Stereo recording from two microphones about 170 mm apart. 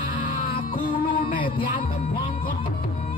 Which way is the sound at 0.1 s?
55° left (ahead or behind).